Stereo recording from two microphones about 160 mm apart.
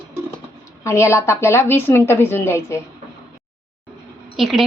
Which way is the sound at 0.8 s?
20° left (ahead or behind).